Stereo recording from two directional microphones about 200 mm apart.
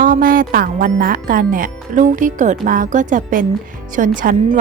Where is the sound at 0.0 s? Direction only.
45° right (ahead or behind).